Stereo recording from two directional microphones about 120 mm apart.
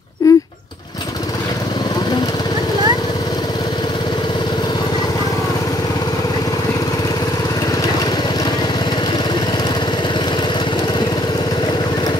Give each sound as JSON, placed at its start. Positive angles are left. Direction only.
{"t": 0.2, "sound": "dog", "side_deg": 25}